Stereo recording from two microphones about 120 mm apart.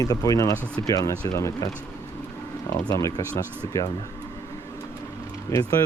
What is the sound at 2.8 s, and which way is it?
Speech, 30° left (ahead or behind).